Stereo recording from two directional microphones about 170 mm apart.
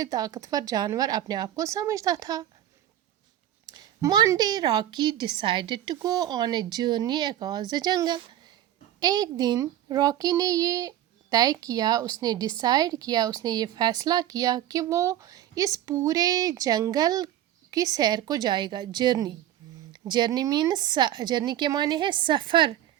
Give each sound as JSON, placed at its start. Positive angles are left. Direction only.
{"t": 0.0, "sound": "a woman's voice", "side_deg": -20}
{"t": 3.7, "sound": "a woman's voice", "side_deg": -25}